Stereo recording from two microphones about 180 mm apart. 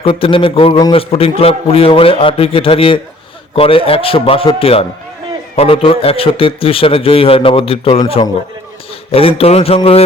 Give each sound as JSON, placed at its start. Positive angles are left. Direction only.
{"t": 0.0, "sound": "a man's voice", "side_deg": 30}